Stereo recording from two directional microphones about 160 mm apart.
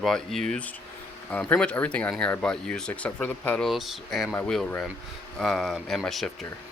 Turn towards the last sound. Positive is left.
turn(degrees=0)  # may be behind; listen again after turning